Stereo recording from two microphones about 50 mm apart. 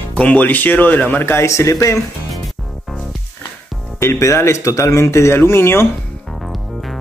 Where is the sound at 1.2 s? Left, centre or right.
Left.